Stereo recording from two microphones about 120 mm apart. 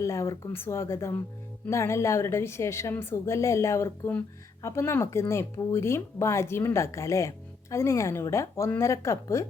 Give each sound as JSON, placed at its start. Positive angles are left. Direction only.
{"t": 0.0, "sound": "speech", "side_deg": 25}